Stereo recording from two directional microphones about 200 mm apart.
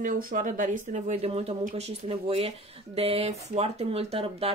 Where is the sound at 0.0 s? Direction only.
40° right (ahead or behind).